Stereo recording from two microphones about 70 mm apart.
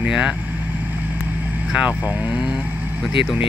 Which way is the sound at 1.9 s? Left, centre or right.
Right.